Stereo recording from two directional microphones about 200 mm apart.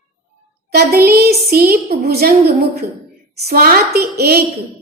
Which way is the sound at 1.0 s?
50° right (ahead or behind).